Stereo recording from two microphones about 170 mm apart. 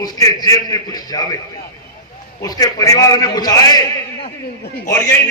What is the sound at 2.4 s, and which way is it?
A man's voice, 20° left (ahead or behind).